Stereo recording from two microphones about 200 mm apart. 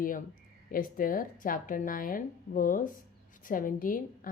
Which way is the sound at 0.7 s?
45° left (ahead or behind).